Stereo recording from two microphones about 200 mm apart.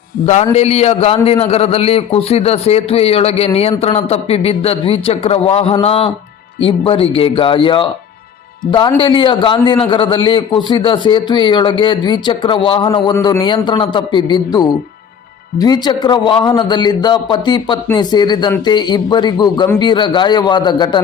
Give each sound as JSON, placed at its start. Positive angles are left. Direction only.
{"t": 0.5, "sound": "a man's voice", "side_deg": 35}